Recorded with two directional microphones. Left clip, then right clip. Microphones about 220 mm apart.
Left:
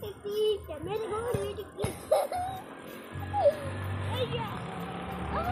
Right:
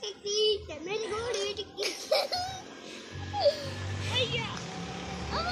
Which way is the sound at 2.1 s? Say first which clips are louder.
Left 2 dB; 10° right (ahead or behind).